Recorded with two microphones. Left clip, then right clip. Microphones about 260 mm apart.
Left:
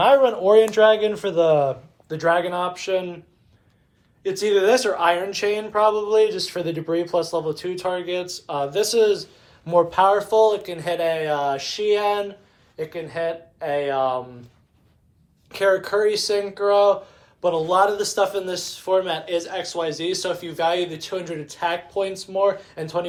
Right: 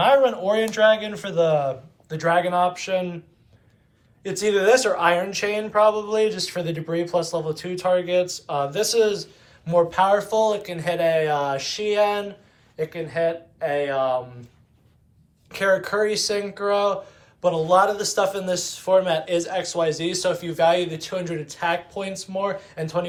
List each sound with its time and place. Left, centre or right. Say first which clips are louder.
0.0 s a man's voice: left 2 dB; left
4.2 s speech: left 2 dB; centre
15.4 s speech: left 1 dB; centre